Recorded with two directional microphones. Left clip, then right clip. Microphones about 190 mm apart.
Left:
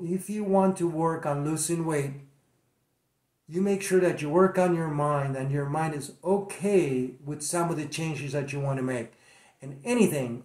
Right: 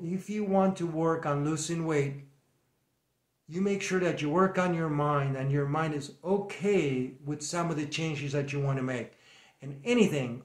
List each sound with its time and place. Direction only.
0.1 s speech: 15° right (ahead or behind)
3.4 s speech: 15° right (ahead or behind)